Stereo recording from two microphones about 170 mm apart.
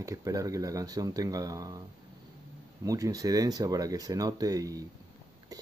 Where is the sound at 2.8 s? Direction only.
20° right (ahead or behind).